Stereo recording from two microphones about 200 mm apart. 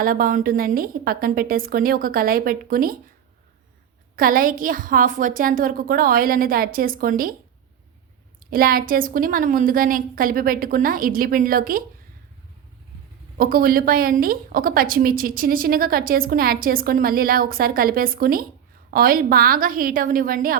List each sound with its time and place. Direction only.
0.0 s a woman's voice: 45° right (ahead or behind)
4.1 s a woman's voice: 45° right (ahead or behind)
8.4 s a woman's voice: 45° right (ahead or behind)
13.3 s a woman's voice: 45° right (ahead or behind)